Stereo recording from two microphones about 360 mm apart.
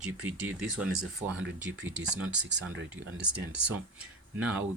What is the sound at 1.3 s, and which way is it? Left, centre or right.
Speech, right.